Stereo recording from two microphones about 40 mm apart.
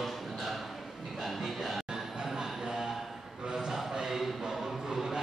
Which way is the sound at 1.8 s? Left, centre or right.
Centre.